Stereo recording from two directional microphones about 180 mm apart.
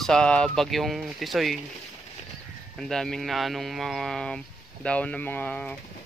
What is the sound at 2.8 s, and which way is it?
Speech, 5° left (ahead or behind).